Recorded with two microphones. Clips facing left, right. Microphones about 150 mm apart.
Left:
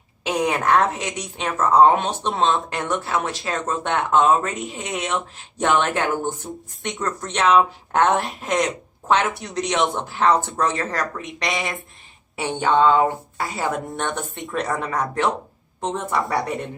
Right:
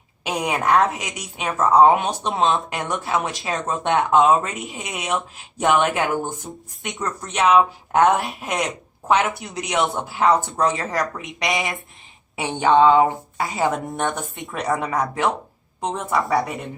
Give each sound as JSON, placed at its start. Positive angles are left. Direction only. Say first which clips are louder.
{"t": 0.3, "sound": "speech", "louder": "left 1 dB", "side_deg": -10}
{"t": 2.3, "sound": "a woman's voice", "louder": "even", "side_deg": 0}
{"t": 2.6, "sound": "speech", "louder": "left 1 dB", "side_deg": -15}
{"t": 11.4, "sound": "a woman's voice", "louder": "right 2 dB", "side_deg": 0}
{"t": 12.4, "sound": "speech", "louder": "right 2 dB", "side_deg": -15}
{"t": 13.8, "sound": "a woman's voice", "louder": "right 2 dB", "side_deg": 0}
{"t": 14.8, "sound": "speech", "louder": "right 1 dB", "side_deg": -10}
{"t": 16.1, "sound": "a woman's voice", "louder": "right 3 dB", "side_deg": 0}